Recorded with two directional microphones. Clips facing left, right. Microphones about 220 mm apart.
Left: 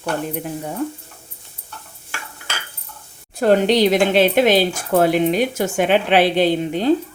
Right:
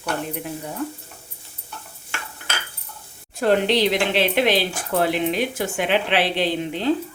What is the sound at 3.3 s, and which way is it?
Speech, 45° left (ahead or behind).